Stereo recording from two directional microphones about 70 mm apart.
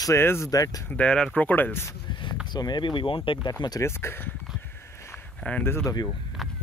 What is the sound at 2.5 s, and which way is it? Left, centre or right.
Speech, left.